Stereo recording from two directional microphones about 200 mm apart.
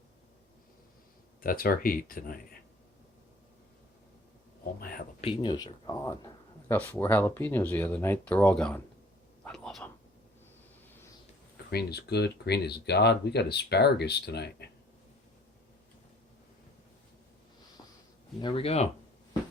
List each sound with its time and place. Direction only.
1.4 s speech: 45° left (ahead or behind)
4.8 s speech: 45° left (ahead or behind)
5.2 s speech: 25° left (ahead or behind); by 8.8 s 5° left (ahead or behind)
9.4 s a sound: 5° left (ahead or behind)
11.7 s speech: 50° left (ahead or behind)
18.3 s speech: 25° left (ahead or behind)